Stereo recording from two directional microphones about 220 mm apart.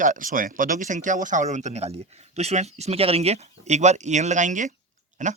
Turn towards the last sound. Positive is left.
turn(degrees=-35)  # may be behind; listen again after turning